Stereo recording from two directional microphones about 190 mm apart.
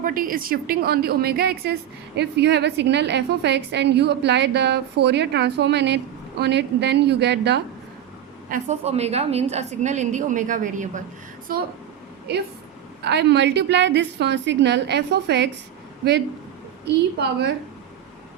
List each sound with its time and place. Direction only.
0.0 s a woman's voice: 45° right (ahead or behind); by 7.6 s 65° right (ahead or behind)
8.4 s a woman's voice: 40° right (ahead or behind)
13.0 s a woman's voice: 60° right (ahead or behind)
16.8 s a woman's voice: 60° right (ahead or behind)